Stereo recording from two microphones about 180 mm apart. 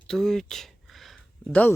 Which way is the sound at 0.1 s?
Centre (ahead or behind).